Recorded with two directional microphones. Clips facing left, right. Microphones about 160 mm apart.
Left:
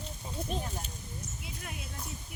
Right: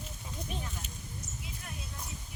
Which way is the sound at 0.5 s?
35° left (ahead or behind).